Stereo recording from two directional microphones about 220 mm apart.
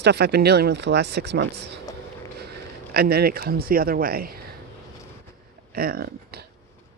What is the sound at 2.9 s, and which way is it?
Speech, 45° right (ahead or behind).